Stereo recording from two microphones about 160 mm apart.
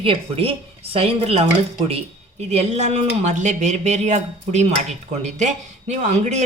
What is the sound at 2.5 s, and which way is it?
A man's voice, 45° right (ahead or behind).